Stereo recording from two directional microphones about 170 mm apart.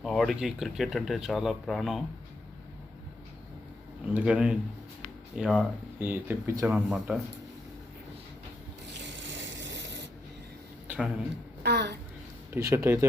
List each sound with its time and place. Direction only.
0.0 s speech: centre (ahead or behind)
4.0 s speech: 5° right (ahead or behind)
6.0 s speech: 10° right (ahead or behind)
8.9 s rub: 90° right
10.8 s a sound: 5° right (ahead or behind)
11.6 s a sound: 75° right (ahead or behind)
12.5 s speech: 15° right (ahead or behind)